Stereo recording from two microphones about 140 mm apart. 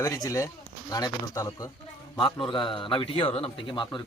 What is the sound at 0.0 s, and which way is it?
Speech, 25° left (ahead or behind).